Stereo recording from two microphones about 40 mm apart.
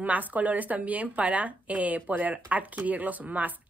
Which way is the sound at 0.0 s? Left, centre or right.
Right.